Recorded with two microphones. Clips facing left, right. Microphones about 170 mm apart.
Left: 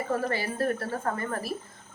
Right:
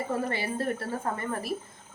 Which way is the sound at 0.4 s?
25° right (ahead or behind).